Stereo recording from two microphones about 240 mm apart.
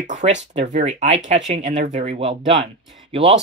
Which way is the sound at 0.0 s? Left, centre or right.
Right.